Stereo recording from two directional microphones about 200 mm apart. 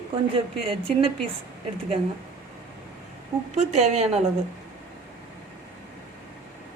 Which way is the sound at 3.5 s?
35° right (ahead or behind).